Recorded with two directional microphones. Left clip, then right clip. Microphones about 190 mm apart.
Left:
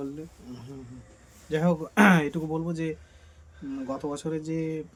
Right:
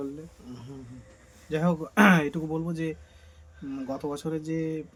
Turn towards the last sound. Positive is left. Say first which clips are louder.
# even
turn(degrees=0)  # may be behind; listen again after turning